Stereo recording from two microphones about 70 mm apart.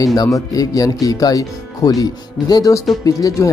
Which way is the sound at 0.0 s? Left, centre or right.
Left.